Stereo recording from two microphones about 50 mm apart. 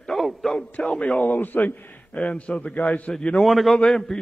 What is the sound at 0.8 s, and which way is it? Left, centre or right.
Speech, left.